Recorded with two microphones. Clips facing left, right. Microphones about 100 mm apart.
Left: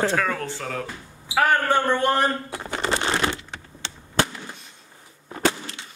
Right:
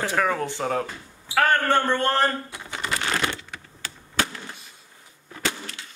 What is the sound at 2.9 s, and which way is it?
Computer keyboard, 25° left (ahead or behind).